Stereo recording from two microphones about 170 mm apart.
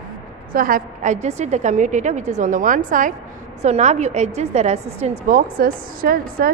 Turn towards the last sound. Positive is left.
turn(degrees=-60)  # may be behind; listen again after turning